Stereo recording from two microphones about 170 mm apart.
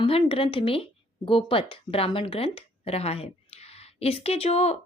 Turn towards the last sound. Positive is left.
turn(degrees=40)  # may be behind; listen again after turning